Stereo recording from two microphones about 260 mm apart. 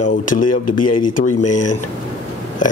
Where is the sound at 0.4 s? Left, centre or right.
Left.